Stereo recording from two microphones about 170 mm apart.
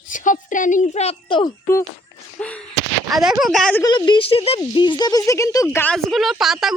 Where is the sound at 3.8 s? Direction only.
25° left (ahead or behind); by 6.7 s centre (ahead or behind).